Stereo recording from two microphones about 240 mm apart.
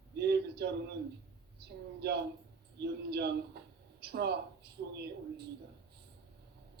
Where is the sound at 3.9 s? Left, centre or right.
Right.